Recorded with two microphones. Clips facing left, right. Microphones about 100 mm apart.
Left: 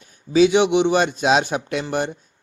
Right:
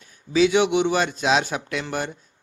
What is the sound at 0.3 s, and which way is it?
A man's voice, 25° left (ahead or behind).